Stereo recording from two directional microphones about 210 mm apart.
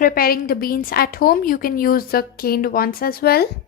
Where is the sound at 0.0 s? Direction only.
45° left (ahead or behind).